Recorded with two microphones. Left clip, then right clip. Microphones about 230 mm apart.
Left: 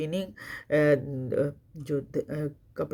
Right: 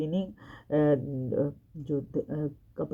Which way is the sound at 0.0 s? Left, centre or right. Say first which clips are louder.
Left 1 dB; left.